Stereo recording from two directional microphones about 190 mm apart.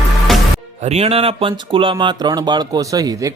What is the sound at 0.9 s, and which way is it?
Speech, 35° right (ahead or behind).